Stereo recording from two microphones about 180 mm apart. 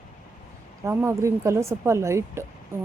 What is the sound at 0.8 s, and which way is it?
Speech, 15° right (ahead or behind).